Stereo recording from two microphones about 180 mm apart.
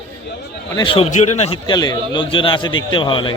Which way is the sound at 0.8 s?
30° left (ahead or behind).